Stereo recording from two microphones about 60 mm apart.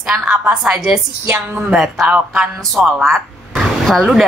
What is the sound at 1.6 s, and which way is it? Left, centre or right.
Speech, centre.